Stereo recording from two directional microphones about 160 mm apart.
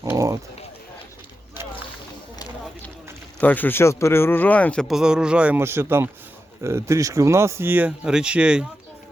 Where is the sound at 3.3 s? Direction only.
10° left (ahead or behind); by 8.6 s 5° right (ahead or behind).